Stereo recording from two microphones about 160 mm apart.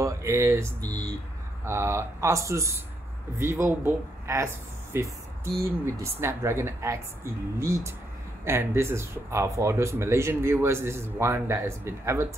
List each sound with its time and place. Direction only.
0.0 s speech: 15° right (ahead or behind)
4.9 s music: 15° right (ahead or behind)
5.7 s speech: 15° right (ahead or behind)